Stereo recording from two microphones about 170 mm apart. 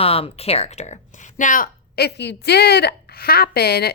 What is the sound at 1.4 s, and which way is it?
Speech, 55° left (ahead or behind).